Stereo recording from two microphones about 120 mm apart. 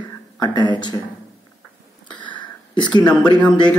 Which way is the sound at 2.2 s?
40° left (ahead or behind).